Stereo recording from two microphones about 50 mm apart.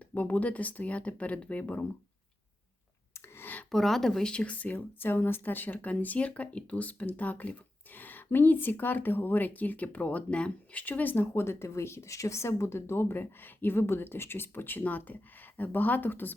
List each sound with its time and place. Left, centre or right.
0.1 s speech: left
3.3 s a sound: left
3.7 s speech: centre; by 4.7 s left
4.7 s speech: left
10.2 s speech: left
10.8 s speech: left
11.4 s speech: left